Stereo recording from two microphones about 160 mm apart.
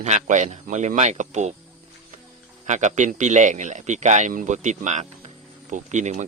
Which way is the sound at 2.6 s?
50° right (ahead or behind).